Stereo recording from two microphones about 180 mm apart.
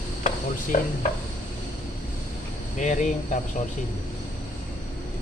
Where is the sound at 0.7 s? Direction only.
45° left (ahead or behind).